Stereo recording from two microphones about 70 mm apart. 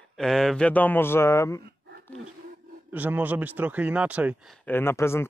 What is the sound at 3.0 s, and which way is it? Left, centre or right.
Speech, right.